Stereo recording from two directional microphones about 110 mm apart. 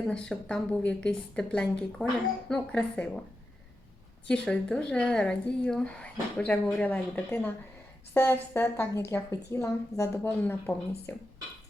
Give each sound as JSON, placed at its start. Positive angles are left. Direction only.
{"t": 0.0, "sound": "speech", "side_deg": 5}
{"t": 4.3, "sound": "a woman's voice", "side_deg": 10}